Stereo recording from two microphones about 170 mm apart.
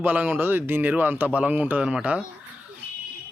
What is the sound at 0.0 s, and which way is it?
Speech, 10° right (ahead or behind).